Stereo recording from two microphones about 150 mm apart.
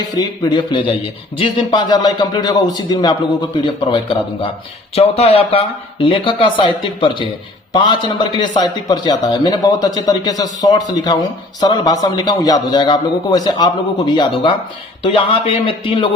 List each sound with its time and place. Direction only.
0.4 s a man's voice: 30° left (ahead or behind)